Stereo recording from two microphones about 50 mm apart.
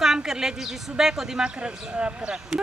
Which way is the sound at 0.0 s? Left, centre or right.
Centre.